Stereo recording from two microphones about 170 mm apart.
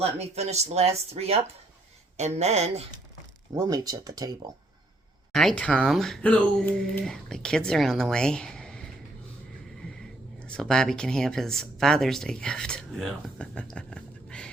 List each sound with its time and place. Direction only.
0.0 s speech: 40° right (ahead or behind)
3.5 s speech: 20° right (ahead or behind)
5.3 s speech: centre (ahead or behind)
10.4 s speech: 5° left (ahead or behind)